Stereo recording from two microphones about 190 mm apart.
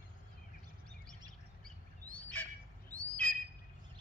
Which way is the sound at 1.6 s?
5° left (ahead or behind).